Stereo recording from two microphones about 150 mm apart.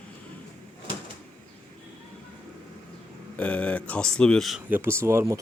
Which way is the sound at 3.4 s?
10° left (ahead or behind).